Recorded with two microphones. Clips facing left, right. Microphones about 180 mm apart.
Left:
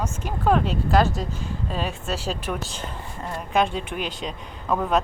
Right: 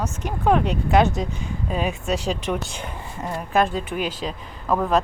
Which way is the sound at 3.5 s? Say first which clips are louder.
Right 2 dB; centre (ahead or behind).